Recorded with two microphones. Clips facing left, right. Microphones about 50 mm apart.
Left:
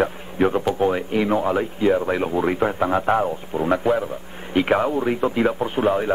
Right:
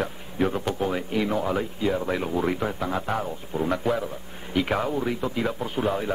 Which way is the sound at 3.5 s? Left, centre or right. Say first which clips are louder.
Left 5 dB; left.